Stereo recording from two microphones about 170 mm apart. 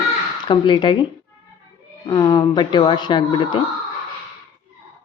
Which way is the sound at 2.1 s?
25° left (ahead or behind).